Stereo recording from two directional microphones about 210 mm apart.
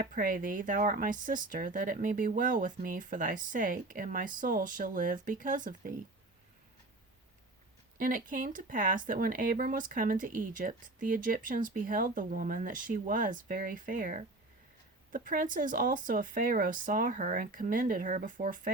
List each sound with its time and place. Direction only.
0.0 s speech: 40° right (ahead or behind)
7.9 s speech: 40° right (ahead or behind)